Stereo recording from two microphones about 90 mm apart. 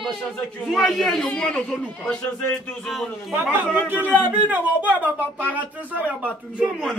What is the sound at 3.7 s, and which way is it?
Speech, 20° right (ahead or behind).